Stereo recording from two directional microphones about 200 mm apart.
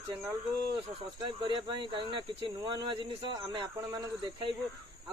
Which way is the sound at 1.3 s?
25° right (ahead or behind).